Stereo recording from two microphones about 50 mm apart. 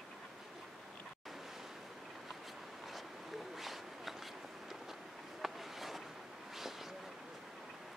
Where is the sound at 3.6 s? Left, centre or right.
Centre.